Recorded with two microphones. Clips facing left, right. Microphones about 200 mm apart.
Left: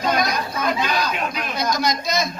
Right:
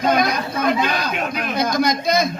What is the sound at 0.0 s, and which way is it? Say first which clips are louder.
Speech: right 3 dB; 55° right (ahead or behind).